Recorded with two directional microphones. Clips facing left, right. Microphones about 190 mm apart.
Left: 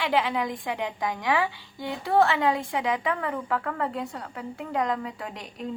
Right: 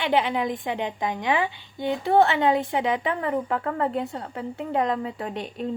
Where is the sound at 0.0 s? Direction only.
25° right (ahead or behind).